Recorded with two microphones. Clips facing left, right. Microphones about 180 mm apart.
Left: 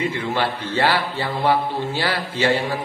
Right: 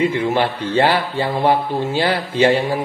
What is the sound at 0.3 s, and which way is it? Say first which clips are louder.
Speech: right 5 dB; 25° right (ahead or behind).